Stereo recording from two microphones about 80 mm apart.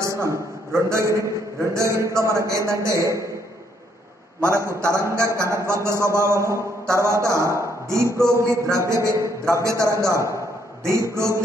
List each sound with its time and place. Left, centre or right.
0.0 s a man's voice: right
4.4 s a man's voice: right